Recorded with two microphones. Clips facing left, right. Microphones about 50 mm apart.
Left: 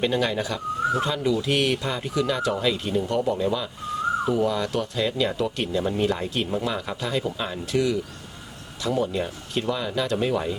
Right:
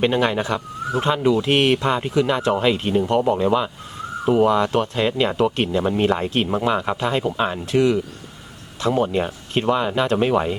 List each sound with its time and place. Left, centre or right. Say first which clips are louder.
0.0 s speech: right 5 dB; right